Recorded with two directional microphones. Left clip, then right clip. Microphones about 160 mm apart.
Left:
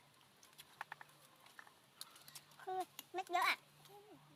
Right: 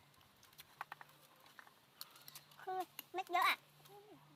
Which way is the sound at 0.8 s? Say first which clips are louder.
Even; 5° right (ahead or behind).